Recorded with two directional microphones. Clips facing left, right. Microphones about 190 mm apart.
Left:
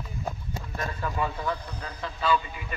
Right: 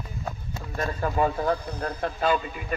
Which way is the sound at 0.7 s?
45° right (ahead or behind).